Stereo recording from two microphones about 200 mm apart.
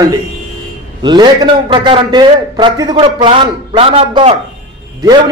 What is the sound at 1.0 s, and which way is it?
A man's voice, 20° right (ahead or behind).